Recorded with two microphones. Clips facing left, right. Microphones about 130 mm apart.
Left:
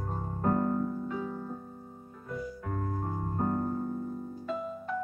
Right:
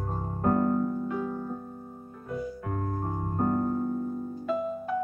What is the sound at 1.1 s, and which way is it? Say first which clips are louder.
Music: right 4 dB; 60° right (ahead or behind).